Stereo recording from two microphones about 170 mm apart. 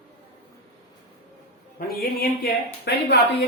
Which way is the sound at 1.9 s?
65° left (ahead or behind).